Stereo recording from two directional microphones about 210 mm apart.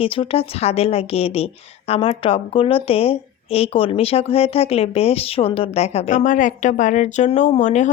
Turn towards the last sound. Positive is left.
turn(degrees=35)  # may be behind; listen again after turning